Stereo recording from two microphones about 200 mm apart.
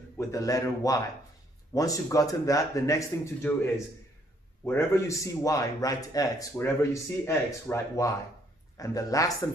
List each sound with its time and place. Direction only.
0.2 s speech: 15° left (ahead or behind)